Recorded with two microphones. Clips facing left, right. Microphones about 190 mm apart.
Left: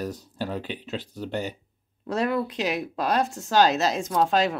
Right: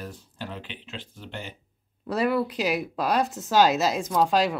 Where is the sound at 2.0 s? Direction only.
5° right (ahead or behind).